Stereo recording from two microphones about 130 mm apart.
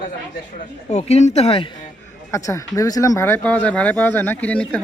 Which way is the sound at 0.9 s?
60° left (ahead or behind).